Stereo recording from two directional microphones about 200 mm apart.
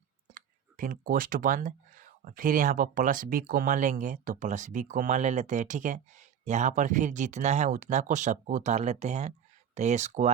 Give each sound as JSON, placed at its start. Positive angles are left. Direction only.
{"t": 0.3, "sound": "speech", "side_deg": -45}